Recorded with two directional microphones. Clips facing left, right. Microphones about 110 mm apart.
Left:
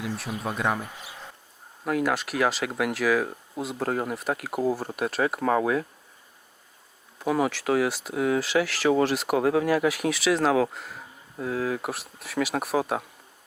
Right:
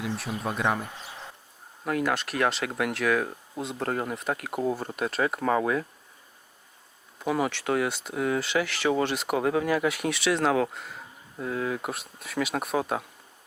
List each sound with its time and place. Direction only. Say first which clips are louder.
0.0 s speech: even; centre (ahead or behind)
7.2 s speech: left 2 dB; centre (ahead or behind)